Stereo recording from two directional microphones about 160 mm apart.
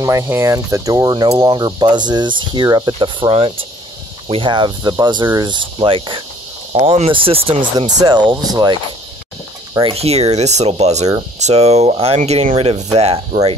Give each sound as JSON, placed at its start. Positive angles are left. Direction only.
{"t": 0.0, "sound": "speech", "side_deg": -20}
{"t": 7.7, "sound": "speech", "side_deg": -25}
{"t": 9.9, "sound": "speech", "side_deg": -40}